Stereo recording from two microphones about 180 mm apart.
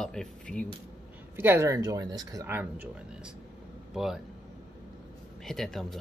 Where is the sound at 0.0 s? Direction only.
5° left (ahead or behind).